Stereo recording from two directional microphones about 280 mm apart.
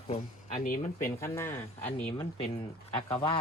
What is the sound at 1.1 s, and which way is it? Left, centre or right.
Speech, centre.